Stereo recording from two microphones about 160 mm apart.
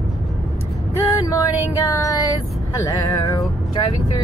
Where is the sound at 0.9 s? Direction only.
20° left (ahead or behind).